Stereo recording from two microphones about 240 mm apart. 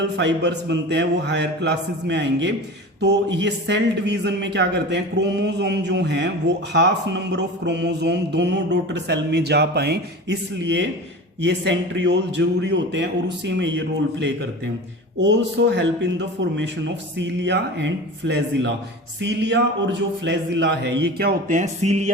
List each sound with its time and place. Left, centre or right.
0.0 s mantra: right